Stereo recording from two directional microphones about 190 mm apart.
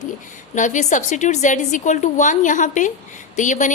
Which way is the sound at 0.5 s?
40° left (ahead or behind).